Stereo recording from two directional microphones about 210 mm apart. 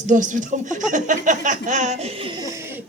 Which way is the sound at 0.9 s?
35° right (ahead or behind).